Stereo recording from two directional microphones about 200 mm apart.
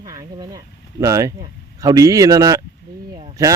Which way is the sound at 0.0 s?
20° right (ahead or behind).